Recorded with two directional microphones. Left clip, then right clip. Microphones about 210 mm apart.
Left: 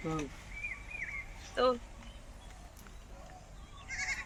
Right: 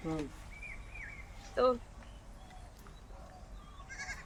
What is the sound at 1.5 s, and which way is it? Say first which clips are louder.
Speech: even; 30° right (ahead or behind).